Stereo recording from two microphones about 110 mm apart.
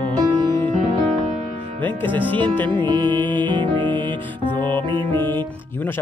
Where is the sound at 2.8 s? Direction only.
40° right (ahead or behind).